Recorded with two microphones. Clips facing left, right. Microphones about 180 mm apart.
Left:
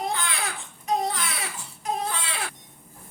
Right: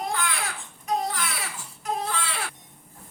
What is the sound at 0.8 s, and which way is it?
Baby cry, 20° left (ahead or behind).